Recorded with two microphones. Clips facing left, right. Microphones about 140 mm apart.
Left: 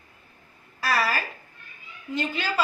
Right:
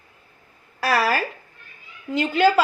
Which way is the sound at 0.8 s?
65° right (ahead or behind).